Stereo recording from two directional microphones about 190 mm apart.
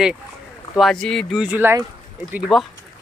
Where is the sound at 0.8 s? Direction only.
Centre (ahead or behind).